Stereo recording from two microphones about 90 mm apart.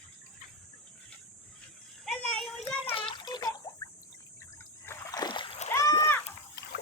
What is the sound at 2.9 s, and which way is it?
Water, 80° left.